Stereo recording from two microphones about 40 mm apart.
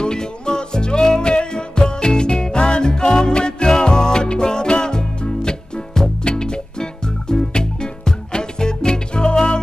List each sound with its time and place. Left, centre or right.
0.0 s music: centre